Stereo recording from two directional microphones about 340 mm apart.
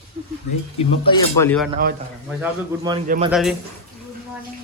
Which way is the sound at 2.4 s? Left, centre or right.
Centre.